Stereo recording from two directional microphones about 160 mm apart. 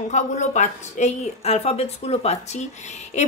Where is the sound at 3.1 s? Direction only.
45° left (ahead or behind).